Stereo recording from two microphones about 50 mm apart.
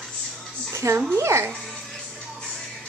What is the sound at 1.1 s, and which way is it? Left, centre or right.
Speech, right.